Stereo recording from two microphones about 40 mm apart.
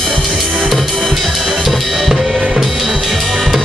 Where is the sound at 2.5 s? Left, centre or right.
Centre.